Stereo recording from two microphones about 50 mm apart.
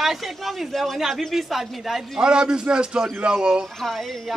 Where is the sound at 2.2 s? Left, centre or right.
Centre.